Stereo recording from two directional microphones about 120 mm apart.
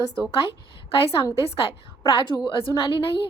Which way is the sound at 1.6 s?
45° left (ahead or behind).